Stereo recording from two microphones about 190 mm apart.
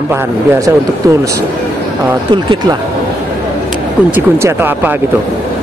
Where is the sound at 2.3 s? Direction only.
25° right (ahead or behind).